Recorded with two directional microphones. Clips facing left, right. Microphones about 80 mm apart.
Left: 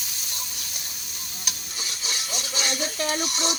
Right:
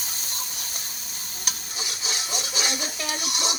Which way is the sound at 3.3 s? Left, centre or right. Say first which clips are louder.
Left 1 dB; centre.